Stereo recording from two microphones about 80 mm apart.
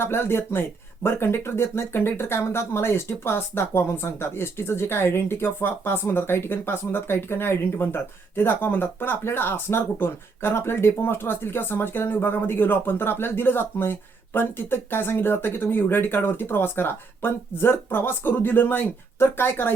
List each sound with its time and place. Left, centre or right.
0.0 s speech: left